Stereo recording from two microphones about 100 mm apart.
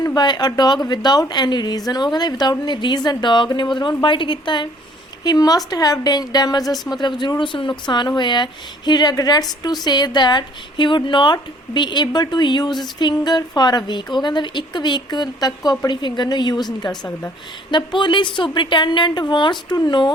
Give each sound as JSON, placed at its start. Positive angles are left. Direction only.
{"t": 0.0, "sound": "a woman's voice", "side_deg": 45}
{"t": 5.2, "sound": "a woman's voice", "side_deg": 40}